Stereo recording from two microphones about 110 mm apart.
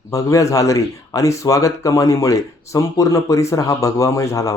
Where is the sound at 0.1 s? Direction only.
30° left (ahead or behind).